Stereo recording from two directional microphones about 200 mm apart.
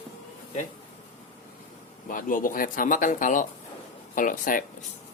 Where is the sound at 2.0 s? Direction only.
45° left (ahead or behind).